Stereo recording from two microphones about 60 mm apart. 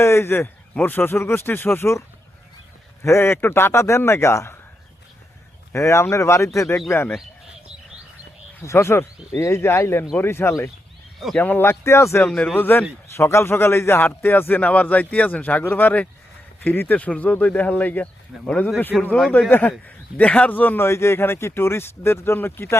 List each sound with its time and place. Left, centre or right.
0.0 s a man's voice: left
0.3 s speech: left
5.7 s speech: left
6.8 s speech: left
8.6 s speech: left
11.3 s speech: left
11.8 s speech: left
12.2 s speech: centre
12.5 s speech: left
13.1 s speech: left
17.0 s speech: left
18.3 s speech: centre
19.5 s speech: left
20.8 s speech: left